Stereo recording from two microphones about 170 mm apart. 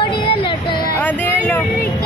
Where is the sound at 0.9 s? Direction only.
10° left (ahead or behind).